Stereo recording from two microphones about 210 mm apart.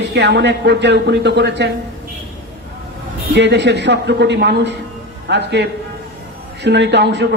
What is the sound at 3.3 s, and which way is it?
A man's voice, 55° right (ahead or behind).